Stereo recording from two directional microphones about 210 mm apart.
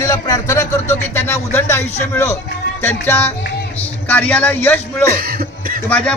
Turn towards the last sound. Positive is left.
turn(degrees=10)  # may be behind; listen again after turning